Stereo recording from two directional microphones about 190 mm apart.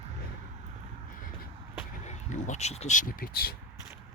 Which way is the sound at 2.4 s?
35° left (ahead or behind).